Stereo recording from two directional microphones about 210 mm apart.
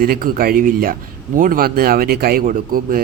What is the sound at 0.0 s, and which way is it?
A man's voice, 45° right (ahead or behind).